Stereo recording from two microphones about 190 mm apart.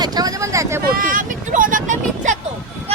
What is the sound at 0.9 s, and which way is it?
Speech, 45° right (ahead or behind).